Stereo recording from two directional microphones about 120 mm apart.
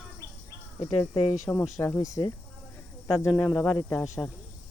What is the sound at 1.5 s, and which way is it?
Speech, 15° left (ahead or behind).